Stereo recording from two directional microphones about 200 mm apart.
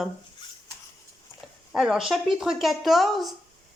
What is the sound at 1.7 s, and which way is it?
A woman's voice, centre (ahead or behind).